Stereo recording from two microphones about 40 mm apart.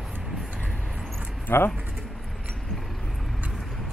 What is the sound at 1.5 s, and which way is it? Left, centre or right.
Speech, left.